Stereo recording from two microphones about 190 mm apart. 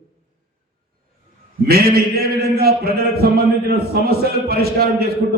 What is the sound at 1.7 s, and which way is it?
Speech, 55° right (ahead or behind).